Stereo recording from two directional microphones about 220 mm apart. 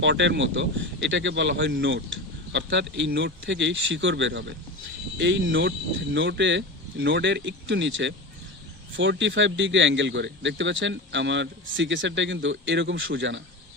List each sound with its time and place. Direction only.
0.0 s speech: 55° right (ahead or behind)